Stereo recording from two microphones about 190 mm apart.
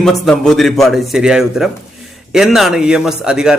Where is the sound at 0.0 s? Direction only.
Centre (ahead or behind).